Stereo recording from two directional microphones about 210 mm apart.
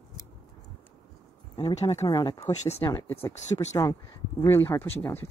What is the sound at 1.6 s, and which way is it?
Speech, 25° left (ahead or behind).